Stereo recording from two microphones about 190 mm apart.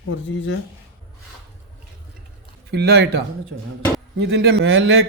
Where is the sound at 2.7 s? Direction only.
60° right (ahead or behind).